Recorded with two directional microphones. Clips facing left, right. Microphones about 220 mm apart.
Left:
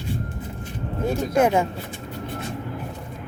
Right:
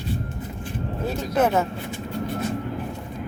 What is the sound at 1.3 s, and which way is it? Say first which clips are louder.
Speech: left 1 dB; 15° left (ahead or behind).